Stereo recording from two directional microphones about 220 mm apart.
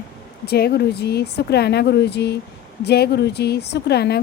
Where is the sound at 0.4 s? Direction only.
45° left (ahead or behind).